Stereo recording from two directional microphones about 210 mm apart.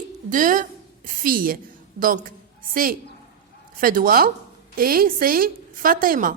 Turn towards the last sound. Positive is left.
turn(degrees=-40)  # may be behind; listen again after turning